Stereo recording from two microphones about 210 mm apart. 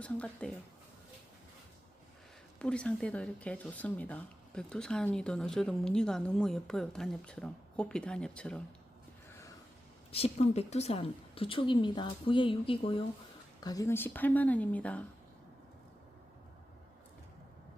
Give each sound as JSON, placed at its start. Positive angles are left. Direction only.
{"t": 0.0, "sound": "speech", "side_deg": 5}
{"t": 2.6, "sound": "speech", "side_deg": 5}
{"t": 10.1, "sound": "a woman's voice", "side_deg": 30}